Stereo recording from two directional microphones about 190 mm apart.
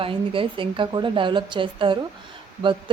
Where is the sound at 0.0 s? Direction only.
30° right (ahead or behind).